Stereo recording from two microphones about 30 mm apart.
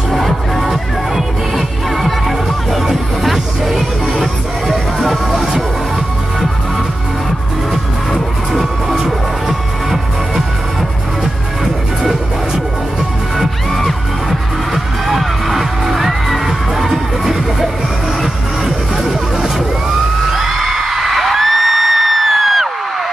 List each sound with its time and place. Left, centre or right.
0.1 s music: centre
2.0 s music: centre
5.3 s music: centre
9.5 s music: centre
11.6 s music: centre
14.7 s music: centre
20.3 s music: centre